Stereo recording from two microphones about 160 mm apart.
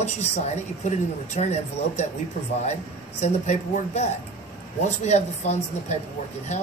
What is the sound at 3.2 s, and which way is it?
Speech, 45° left (ahead or behind).